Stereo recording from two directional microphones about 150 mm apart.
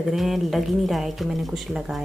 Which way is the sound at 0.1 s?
Centre (ahead or behind).